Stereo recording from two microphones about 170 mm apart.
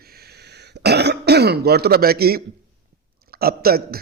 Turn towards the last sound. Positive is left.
turn(degrees=-60)  # may be behind; listen again after turning